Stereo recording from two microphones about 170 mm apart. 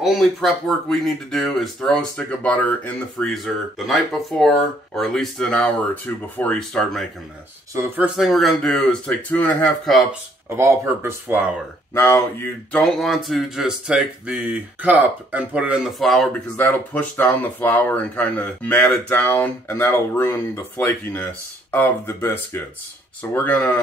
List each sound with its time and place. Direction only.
0.0 s speech: centre (ahead or behind)
7.7 s speech: 10° right (ahead or behind)
10.5 s speech: 15° right (ahead or behind)
11.9 s speech: 15° left (ahead or behind)
12.8 s speech: centre (ahead or behind)